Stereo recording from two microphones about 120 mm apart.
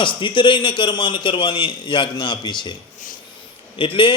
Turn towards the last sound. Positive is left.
turn(degrees=45)  # may be behind; listen again after turning